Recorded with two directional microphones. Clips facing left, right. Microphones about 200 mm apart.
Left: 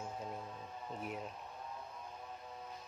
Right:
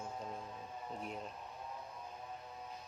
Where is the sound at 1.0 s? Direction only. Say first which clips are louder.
Left 3 dB; 5° left (ahead or behind).